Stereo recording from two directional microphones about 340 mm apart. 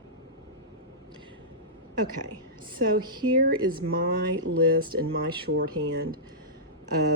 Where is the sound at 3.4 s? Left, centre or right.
Right.